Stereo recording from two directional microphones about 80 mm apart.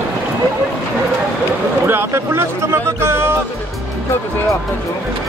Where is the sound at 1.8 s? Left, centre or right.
Right.